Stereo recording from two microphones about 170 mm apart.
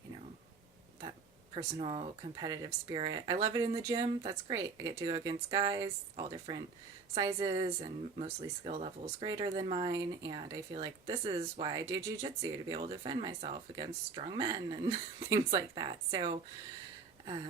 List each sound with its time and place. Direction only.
1.5 s speech: 35° right (ahead or behind)
9.2 s speech: 25° right (ahead or behind)